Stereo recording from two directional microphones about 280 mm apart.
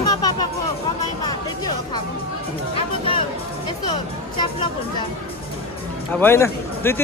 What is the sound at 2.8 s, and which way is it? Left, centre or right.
Speech, centre.